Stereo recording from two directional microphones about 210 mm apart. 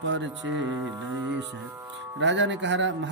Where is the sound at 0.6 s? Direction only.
5° right (ahead or behind).